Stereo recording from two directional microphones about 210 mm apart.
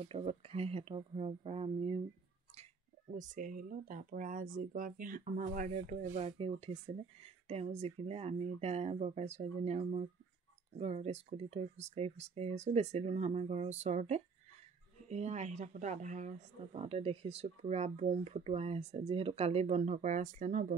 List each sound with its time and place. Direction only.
0.0 s speech: 25° right (ahead or behind)
3.2 s speech: 40° right (ahead or behind)
6.1 s speech: 25° right (ahead or behind)